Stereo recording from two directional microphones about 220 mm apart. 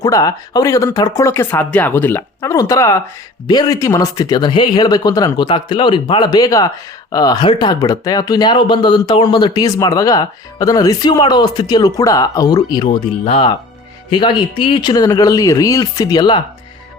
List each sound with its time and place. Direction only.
0.0 s speech: 15° left (ahead or behind)